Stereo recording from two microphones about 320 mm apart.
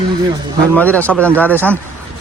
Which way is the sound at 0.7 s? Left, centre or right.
Centre.